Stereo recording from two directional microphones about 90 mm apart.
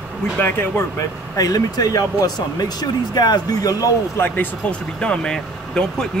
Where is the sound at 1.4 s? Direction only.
45° left (ahead or behind).